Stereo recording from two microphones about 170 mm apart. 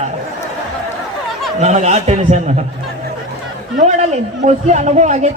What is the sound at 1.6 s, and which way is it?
Speech, 40° right (ahead or behind).